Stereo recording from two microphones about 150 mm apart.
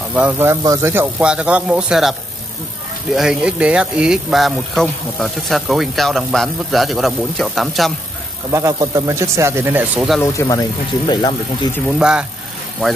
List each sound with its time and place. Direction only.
0.1 s speech: 10° right (ahead or behind)
3.2 s speech: 5° right (ahead or behind)
8.5 s speech: 20° right (ahead or behind)
10.2 s speech: 20° left (ahead or behind)
12.0 s speech: 5° right (ahead or behind)